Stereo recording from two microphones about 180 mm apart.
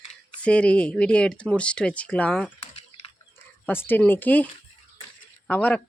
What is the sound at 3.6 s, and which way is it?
Speech, 10° left (ahead or behind).